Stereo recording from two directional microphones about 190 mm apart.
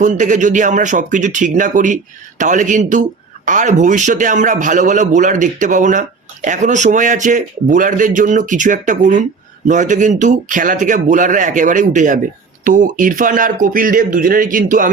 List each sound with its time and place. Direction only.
0.0 s speech: 40° right (ahead or behind)